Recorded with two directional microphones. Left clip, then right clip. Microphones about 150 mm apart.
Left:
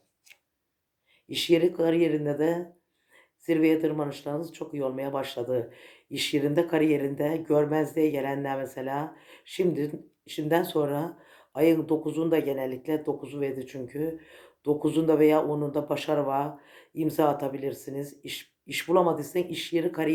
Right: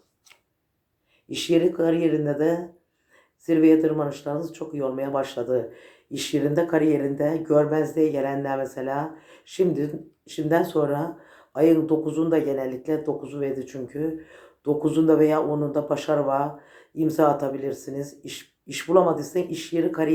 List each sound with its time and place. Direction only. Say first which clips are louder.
1.3 s speech: right 2 dB; 40° left (ahead or behind)
12.5 s speech: right 4 dB; 50° left (ahead or behind)